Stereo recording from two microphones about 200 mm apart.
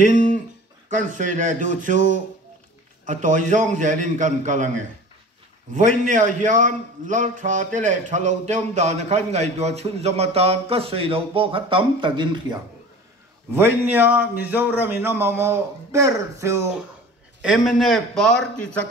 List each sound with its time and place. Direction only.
0.8 s a man's voice: 40° right (ahead or behind); by 12.5 s 25° right (ahead or behind)
13.6 s a man's voice: 10° right (ahead or behind)
17.4 s a man's voice: centre (ahead or behind)